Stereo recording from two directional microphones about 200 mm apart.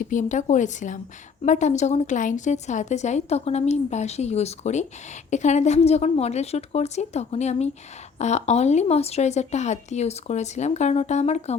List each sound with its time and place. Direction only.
0.0 s a woman's voice: 40° left (ahead or behind)